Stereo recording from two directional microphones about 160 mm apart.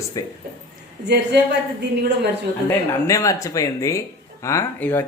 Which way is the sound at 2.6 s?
20° left (ahead or behind).